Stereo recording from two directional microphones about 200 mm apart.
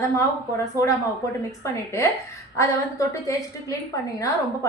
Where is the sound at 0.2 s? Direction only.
15° left (ahead or behind).